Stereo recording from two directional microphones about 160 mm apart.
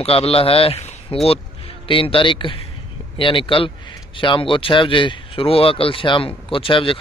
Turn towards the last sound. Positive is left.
turn(degrees=35)  # may be behind; listen again after turning